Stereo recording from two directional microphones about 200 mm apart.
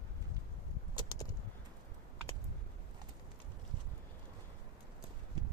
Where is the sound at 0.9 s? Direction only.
20° left (ahead or behind).